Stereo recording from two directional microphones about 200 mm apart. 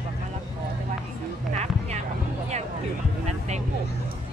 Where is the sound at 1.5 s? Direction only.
35° right (ahead or behind).